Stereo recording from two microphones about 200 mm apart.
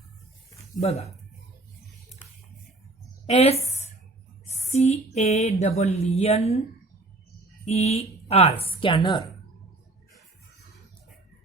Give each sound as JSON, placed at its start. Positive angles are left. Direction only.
{"t": 0.8, "sound": "speech", "side_deg": 30}
{"t": 3.2, "sound": "speech", "side_deg": 30}